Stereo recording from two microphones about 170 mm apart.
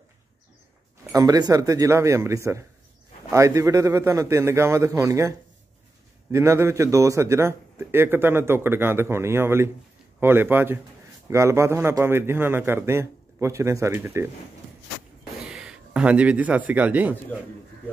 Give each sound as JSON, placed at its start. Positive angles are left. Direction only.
{"t": 1.1, "sound": "a man's voice", "side_deg": -20}
{"t": 6.3, "sound": "a man's voice", "side_deg": -15}
{"t": 15.4, "sound": "a man's voice", "side_deg": -5}